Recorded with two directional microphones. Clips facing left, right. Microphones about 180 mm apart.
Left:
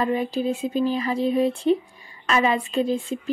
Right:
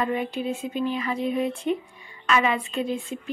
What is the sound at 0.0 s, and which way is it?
Speech, 35° left (ahead or behind).